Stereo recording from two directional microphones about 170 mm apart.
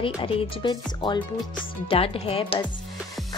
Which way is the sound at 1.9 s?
35° left (ahead or behind).